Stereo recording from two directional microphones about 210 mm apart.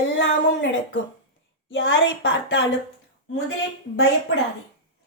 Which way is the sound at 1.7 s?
65° left (ahead or behind).